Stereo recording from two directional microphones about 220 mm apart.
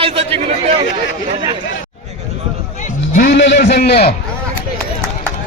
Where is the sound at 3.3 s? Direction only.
55° left (ahead or behind).